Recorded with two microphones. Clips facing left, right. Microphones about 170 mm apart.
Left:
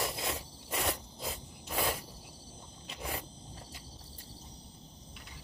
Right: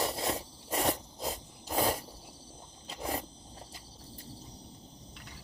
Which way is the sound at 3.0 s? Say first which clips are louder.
Right 5 dB; 40° right (ahead or behind).